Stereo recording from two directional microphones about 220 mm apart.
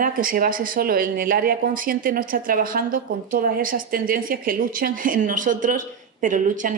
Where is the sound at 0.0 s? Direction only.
40° right (ahead or behind).